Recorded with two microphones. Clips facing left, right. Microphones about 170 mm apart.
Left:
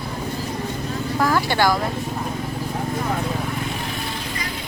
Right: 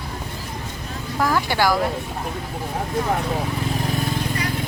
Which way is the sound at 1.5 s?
10° right (ahead or behind).